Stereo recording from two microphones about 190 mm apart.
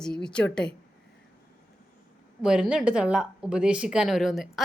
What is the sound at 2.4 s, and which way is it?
A woman's voice, 5° right (ahead or behind).